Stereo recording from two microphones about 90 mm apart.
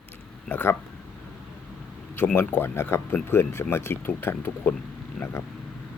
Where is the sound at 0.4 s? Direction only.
20° left (ahead or behind).